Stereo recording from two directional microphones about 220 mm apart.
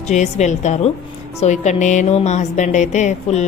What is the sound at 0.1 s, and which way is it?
A woman's voice, 30° left (ahead or behind).